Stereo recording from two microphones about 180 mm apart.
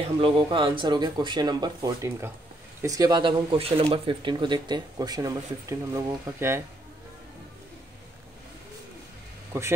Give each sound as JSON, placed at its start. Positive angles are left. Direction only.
{"t": 0.2, "sound": "speech", "side_deg": -25}
{"t": 9.5, "sound": "speech", "side_deg": -15}